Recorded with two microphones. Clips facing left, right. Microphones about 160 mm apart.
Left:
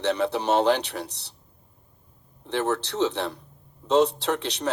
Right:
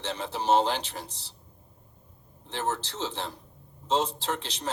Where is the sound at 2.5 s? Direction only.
65° left (ahead or behind).